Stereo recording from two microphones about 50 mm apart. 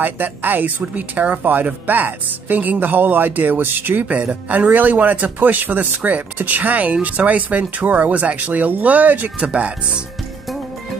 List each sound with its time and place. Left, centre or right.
0.0 s speech: right
9.4 s speech: right